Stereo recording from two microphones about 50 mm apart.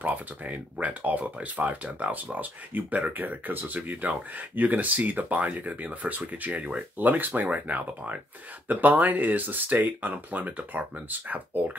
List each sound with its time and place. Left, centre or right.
0.0 s speech: right